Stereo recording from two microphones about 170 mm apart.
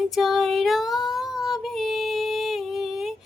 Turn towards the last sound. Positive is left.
turn(degrees=0)  # may be behind; listen again after turning